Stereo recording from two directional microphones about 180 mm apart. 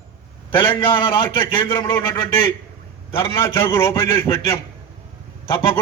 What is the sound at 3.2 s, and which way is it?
A man's voice, 15° left (ahead or behind).